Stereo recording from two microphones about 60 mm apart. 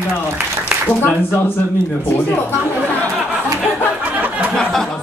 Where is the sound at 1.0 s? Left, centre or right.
Left.